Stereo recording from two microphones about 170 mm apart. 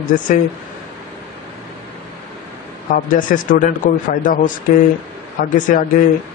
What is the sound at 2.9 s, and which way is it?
A man's voice, 50° left (ahead or behind).